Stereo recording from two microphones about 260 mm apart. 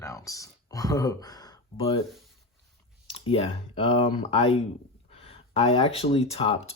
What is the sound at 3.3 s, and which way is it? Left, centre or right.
Speech, left.